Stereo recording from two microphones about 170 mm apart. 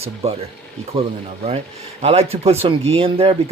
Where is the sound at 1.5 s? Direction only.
40° right (ahead or behind).